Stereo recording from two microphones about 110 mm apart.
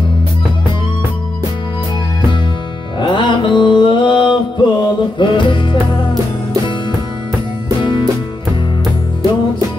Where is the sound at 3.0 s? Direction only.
45° left (ahead or behind).